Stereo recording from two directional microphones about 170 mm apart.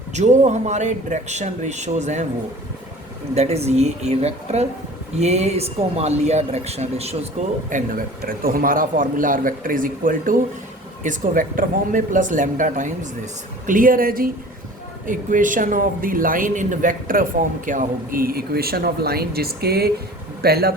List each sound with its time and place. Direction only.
0.1 s speech: 45° right (ahead or behind)
3.3 s a man's voice: 40° right (ahead or behind); by 20.7 s 65° right (ahead or behind)